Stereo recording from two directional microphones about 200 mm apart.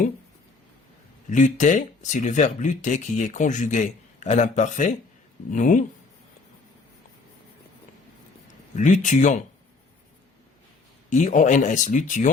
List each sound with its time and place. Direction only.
1.3 s speech: 40° left (ahead or behind)
8.7 s speech: 40° left (ahead or behind)
11.1 s speech: 40° left (ahead or behind)